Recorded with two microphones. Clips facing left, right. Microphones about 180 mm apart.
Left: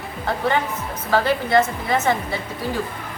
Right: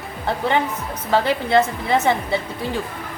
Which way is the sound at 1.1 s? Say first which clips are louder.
Right 1 dB; 25° right (ahead or behind).